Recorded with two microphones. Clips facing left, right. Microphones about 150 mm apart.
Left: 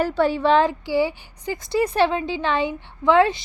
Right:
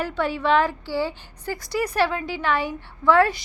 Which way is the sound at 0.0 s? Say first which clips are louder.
Left 5 dB; 35° left (ahead or behind).